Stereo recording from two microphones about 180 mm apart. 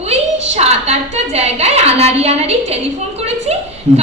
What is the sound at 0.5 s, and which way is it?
A woman's voice, 35° right (ahead or behind).